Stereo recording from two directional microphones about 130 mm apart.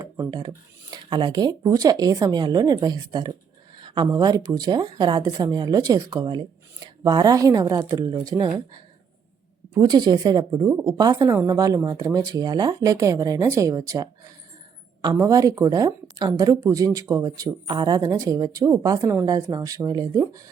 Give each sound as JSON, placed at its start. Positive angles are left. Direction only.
{"t": 0.0, "sound": "speech", "side_deg": -30}